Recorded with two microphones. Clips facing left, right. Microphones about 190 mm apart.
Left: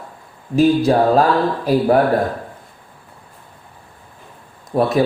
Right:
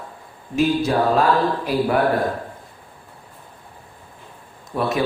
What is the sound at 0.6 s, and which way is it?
Speech, 35° left (ahead or behind).